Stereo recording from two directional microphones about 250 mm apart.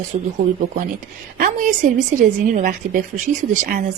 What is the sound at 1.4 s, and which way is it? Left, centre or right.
A woman's voice, right.